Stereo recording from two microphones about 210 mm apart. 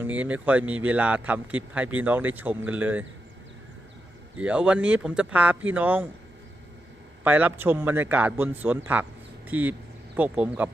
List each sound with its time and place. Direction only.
0.0 s speech: 5° right (ahead or behind)
4.4 s speech: 5° right (ahead or behind)
7.3 s speech: 10° right (ahead or behind)